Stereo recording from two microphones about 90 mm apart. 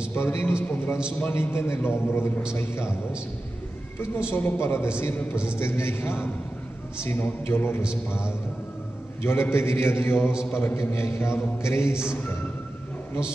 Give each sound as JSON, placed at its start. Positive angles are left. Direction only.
{"t": 0.1, "sound": "a man's voice", "side_deg": 25}
{"t": 4.3, "sound": "a man's voice", "side_deg": 25}